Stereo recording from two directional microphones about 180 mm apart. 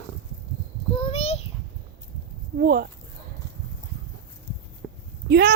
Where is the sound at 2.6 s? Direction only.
55° right (ahead or behind).